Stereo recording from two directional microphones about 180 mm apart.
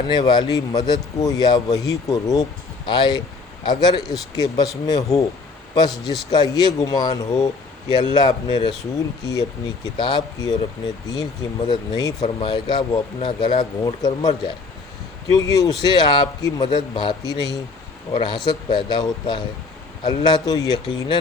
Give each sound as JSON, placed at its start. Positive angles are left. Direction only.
{"t": 0.1, "sound": "a man's voice", "side_deg": 25}